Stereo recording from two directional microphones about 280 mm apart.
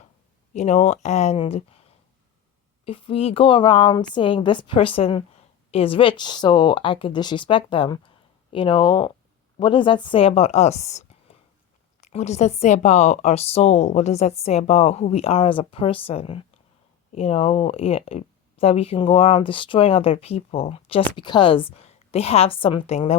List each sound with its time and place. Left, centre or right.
0.5 s a woman's voice: left
2.8 s a woman's voice: centre